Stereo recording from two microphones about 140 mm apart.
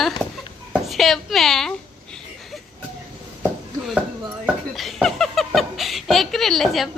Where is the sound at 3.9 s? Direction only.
10° right (ahead or behind).